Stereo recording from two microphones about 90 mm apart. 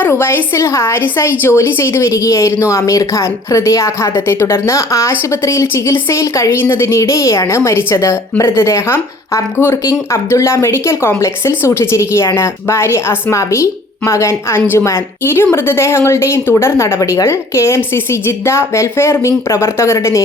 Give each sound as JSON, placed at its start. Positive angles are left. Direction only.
{"t": 0.0, "sound": "a woman's voice", "side_deg": 25}